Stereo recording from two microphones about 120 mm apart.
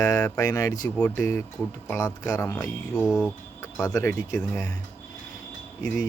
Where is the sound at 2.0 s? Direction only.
30° left (ahead or behind).